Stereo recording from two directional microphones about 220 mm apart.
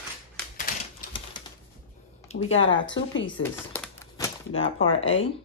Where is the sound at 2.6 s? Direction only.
55° left (ahead or behind).